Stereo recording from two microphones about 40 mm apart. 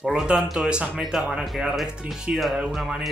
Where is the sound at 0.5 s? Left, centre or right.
Right.